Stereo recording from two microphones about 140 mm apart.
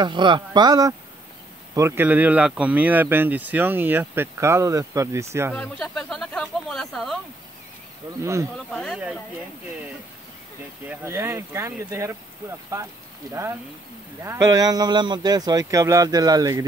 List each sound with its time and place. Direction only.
0.0 s speech: 35° right (ahead or behind)
1.8 s speech: 15° right (ahead or behind)
5.5 s speech: 5° left (ahead or behind)
8.2 s speech: 20° right (ahead or behind)
8.7 s speech: 5° left (ahead or behind)
11.1 s speech: 20° right (ahead or behind)